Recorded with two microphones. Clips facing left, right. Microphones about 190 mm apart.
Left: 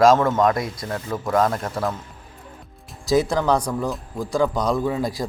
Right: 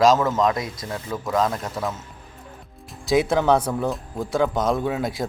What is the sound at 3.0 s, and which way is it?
Speech, centre (ahead or behind).